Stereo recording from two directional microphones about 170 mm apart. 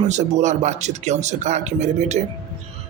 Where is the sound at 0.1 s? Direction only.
45° right (ahead or behind).